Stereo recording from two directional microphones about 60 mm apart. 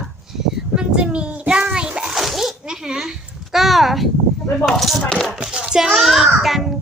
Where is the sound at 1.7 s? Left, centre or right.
Centre.